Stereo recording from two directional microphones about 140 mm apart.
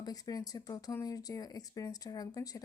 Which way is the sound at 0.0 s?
25° left (ahead or behind).